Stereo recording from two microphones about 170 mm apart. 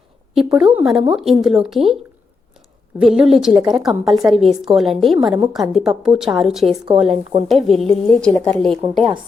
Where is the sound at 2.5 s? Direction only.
Centre (ahead or behind).